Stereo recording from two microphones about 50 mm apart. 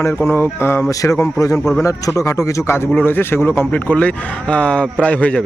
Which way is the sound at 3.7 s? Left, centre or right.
Left.